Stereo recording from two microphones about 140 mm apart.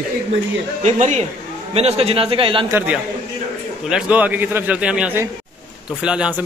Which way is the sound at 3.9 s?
10° right (ahead or behind).